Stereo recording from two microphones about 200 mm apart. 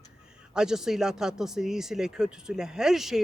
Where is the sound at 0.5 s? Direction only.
5° right (ahead or behind).